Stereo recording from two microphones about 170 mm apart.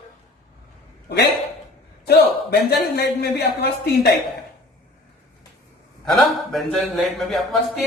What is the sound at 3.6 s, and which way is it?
Speech, 70° left (ahead or behind).